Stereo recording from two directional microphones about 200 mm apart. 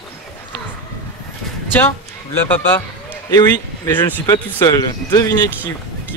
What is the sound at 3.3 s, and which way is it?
Speech, 15° left (ahead or behind).